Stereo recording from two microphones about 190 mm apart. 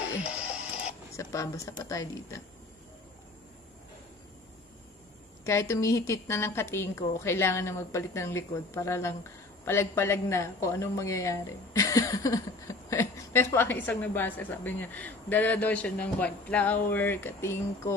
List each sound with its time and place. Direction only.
0.2 s music: 5° right (ahead or behind)
1.1 s a woman's voice: 15° left (ahead or behind)
5.4 s a woman's voice: 15° left (ahead or behind)